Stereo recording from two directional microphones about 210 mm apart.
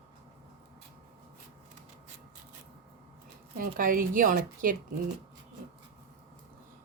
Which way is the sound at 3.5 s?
40° right (ahead or behind).